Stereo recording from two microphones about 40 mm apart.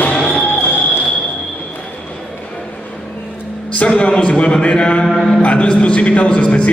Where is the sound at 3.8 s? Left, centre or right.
Left.